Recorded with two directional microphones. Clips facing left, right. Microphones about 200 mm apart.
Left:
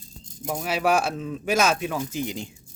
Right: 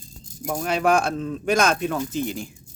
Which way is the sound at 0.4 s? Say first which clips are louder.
Right 2 dB; 5° left (ahead or behind).